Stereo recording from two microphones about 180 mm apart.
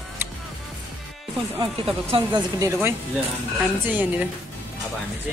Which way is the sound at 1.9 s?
30° right (ahead or behind).